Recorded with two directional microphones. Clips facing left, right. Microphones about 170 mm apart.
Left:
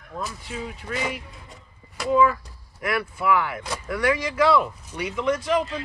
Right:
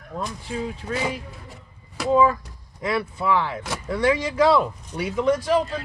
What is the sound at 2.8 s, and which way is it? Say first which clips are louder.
Speech: right 1 dB; 25° right (ahead or behind).